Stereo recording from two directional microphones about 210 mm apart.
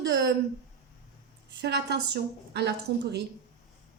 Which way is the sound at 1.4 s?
50° right (ahead or behind).